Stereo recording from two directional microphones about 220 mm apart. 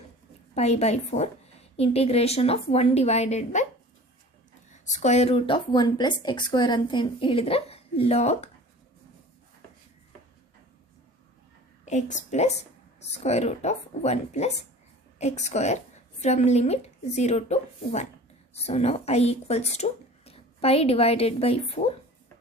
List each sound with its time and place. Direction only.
0.5 s speech: 30° left (ahead or behind)
4.7 s speech: 30° left (ahead or behind)
11.9 s a woman's voice: 35° left (ahead or behind)